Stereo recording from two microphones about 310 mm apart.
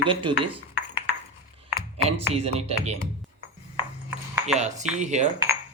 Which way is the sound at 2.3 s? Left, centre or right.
Centre.